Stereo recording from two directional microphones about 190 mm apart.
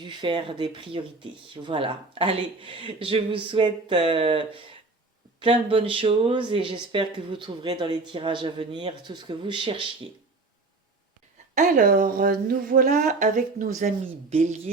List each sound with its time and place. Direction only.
0.0 s speech: 25° right (ahead or behind)
11.5 s a woman's voice: 45° right (ahead or behind)